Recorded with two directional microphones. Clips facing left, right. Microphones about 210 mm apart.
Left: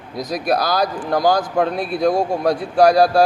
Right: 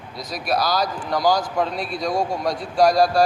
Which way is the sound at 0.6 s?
55° left (ahead or behind).